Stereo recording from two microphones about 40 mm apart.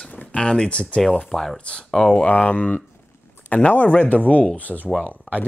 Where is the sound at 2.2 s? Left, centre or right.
Left.